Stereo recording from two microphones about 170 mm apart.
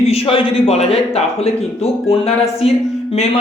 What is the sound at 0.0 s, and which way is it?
A man's voice, 35° left (ahead or behind).